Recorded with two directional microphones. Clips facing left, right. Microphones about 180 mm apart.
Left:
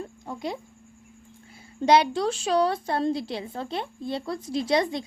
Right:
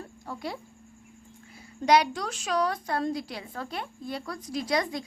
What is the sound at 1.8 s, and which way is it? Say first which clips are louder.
A woman's voice: left 3 dB; 30° left (ahead or behind).